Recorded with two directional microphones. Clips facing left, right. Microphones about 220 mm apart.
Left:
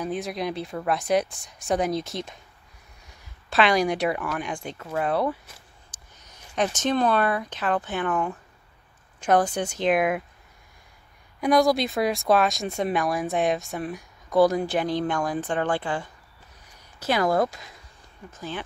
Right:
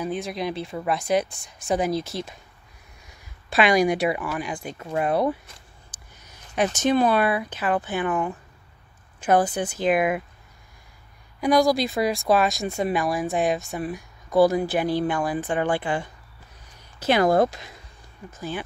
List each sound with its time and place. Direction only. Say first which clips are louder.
0.0 s speech: right 1 dB; centre (ahead or behind)
3.4 s speech: right 2 dB; 10° right (ahead or behind)
11.4 s speech: right 1 dB; centre (ahead or behind)
17.0 s speech: right 4 dB; 25° right (ahead or behind)